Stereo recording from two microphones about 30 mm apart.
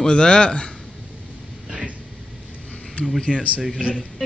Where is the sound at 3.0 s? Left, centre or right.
Left.